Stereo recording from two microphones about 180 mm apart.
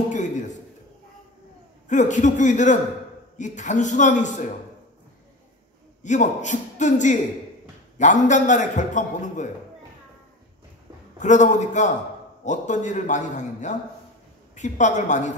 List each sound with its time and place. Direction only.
0.1 s a sound: 45° left (ahead or behind)
1.9 s a man's voice: 45° left (ahead or behind)
6.0 s a man's voice: 45° left (ahead or behind)
11.1 s a man's voice: 40° left (ahead or behind)